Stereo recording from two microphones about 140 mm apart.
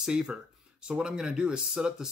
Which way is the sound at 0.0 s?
5° right (ahead or behind).